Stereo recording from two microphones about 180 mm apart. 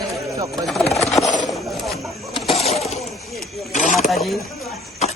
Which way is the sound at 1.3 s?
Centre (ahead or behind).